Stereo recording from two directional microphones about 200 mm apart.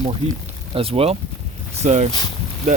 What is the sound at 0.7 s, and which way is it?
Speech, 30° right (ahead or behind).